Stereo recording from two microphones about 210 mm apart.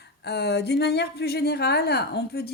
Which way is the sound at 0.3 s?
50° left (ahead or behind).